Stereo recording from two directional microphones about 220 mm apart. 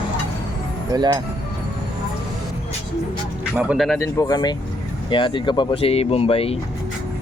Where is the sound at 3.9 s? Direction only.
15° left (ahead or behind).